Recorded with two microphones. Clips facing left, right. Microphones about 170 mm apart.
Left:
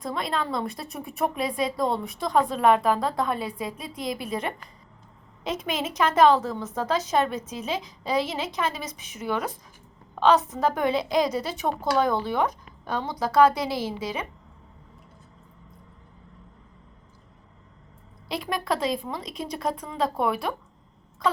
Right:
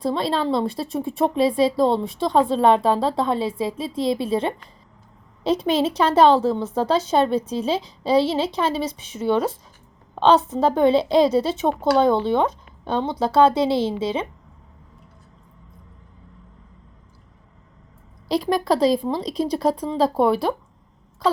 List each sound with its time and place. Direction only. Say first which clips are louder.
0.0 s a woman's voice: right 7 dB; 30° right (ahead or behind)
18.3 s a woman's voice: right 8 dB; 35° right (ahead or behind)